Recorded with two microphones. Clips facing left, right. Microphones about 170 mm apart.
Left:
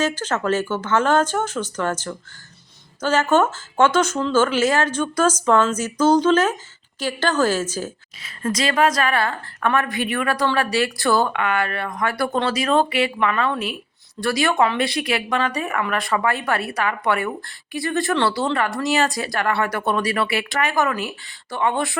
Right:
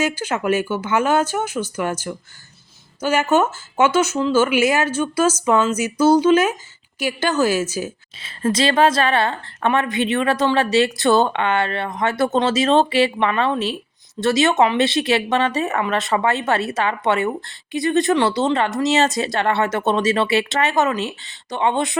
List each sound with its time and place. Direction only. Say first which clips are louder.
0.0 s speech: right 1 dB; 10° right (ahead or behind)
8.2 s speech: right 4 dB; 30° right (ahead or behind)